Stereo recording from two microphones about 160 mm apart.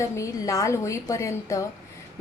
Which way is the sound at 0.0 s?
20° left (ahead or behind).